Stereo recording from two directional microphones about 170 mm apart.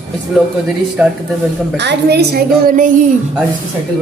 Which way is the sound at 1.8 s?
80° right.